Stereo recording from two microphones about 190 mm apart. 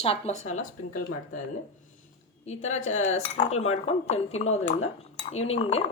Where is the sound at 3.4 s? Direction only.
35° left (ahead or behind).